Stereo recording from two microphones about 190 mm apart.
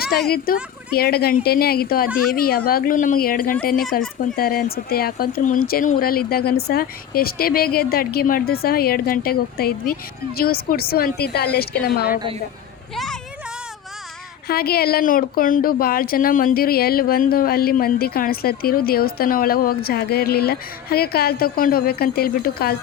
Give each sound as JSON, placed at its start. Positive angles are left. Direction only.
{"t": 0.3, "sound": "a woman's voice", "side_deg": 55}
{"t": 14.4, "sound": "a woman's voice", "side_deg": 55}